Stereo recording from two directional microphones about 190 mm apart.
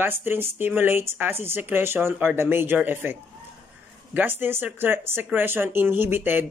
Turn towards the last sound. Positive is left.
turn(degrees=-10)  # may be behind; listen again after turning